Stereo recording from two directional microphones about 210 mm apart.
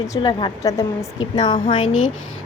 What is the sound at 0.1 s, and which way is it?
Speech, 20° left (ahead or behind).